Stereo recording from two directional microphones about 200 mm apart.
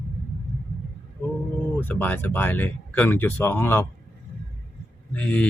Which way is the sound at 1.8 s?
10° left (ahead or behind).